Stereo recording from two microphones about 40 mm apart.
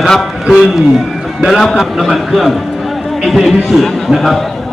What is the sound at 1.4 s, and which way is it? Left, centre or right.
A man's voice, centre.